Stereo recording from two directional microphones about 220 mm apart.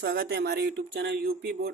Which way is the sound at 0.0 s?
45° right (ahead or behind).